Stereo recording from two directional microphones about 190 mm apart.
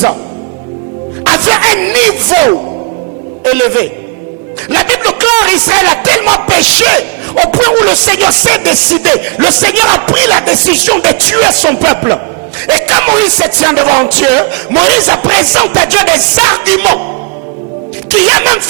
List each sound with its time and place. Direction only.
1.2 s music: 10° right (ahead or behind)
3.4 s music: 15° right (ahead or behind)
4.7 s speech: 15° right (ahead or behind)
6.4 s music: 10° right (ahead or behind)
18.1 s music: 10° right (ahead or behind)